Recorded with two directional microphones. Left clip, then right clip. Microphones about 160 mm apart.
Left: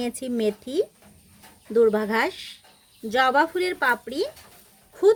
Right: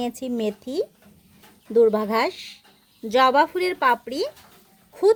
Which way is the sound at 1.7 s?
10° right (ahead or behind).